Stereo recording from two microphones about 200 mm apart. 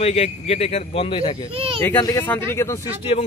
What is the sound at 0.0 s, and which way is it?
A man's voice, 30° left (ahead or behind).